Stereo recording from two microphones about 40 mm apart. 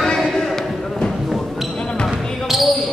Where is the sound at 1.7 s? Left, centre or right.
Left.